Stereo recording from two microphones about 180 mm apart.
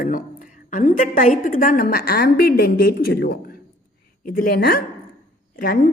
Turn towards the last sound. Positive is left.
turn(degrees=55)  # may be behind; listen again after turning